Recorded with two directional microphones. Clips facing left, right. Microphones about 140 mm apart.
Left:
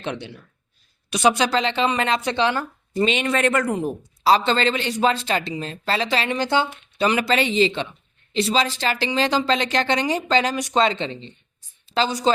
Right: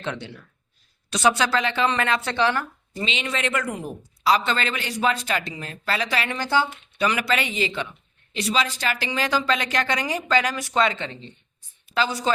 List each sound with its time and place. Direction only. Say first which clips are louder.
0.0 s speech: left 2 dB; 20° left (ahead or behind)
3.0 s speech: left 7 dB; 50° left (ahead or behind)
3.8 s a woman's voice: left 8 dB; 30° left (ahead or behind)